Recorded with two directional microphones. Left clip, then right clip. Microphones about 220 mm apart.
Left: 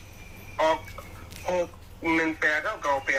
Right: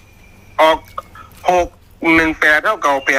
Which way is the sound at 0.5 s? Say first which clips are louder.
Right 12 dB; 50° right (ahead or behind).